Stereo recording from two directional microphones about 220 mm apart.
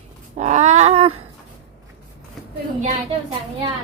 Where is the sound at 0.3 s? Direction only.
30° right (ahead or behind).